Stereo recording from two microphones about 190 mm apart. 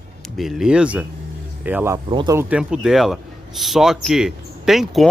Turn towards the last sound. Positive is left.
turn(degrees=0)  # may be behind; listen again after turning